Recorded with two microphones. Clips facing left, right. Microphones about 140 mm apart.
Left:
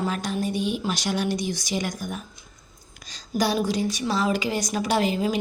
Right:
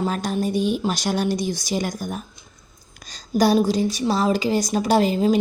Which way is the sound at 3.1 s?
40° right (ahead or behind).